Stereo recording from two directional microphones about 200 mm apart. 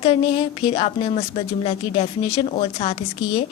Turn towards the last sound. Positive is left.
turn(degrees=30)  # may be behind; listen again after turning